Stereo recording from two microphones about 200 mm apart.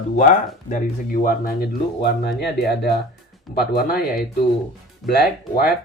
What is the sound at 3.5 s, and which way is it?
Speech, 50° left (ahead or behind).